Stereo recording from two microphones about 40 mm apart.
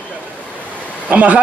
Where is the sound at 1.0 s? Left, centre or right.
Right.